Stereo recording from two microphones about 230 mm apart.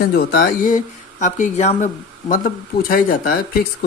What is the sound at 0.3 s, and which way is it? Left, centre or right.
Speech, left.